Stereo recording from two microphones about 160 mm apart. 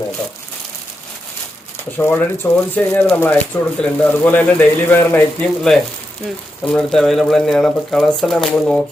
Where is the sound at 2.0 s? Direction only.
15° left (ahead or behind).